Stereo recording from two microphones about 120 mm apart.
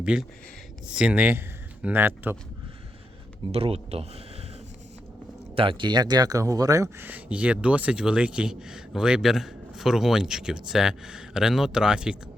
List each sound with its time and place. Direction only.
0.0 s speech: 5° right (ahead or behind)
3.5 s speech: 55° right (ahead or behind)
5.5 s speech: 45° right (ahead or behind); by 7.1 s 25° right (ahead or behind)
7.1 s speech: 10° right (ahead or behind)